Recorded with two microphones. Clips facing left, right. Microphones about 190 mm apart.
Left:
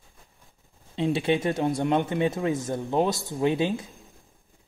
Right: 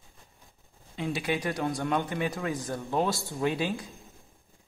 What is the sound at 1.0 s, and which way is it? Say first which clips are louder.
Speech: left 6 dB; 25° left (ahead or behind).